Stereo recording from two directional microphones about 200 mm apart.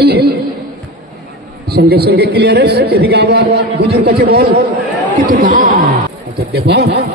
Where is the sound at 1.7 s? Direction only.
55° right (ahead or behind).